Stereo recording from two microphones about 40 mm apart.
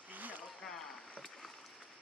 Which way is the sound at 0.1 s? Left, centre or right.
Right.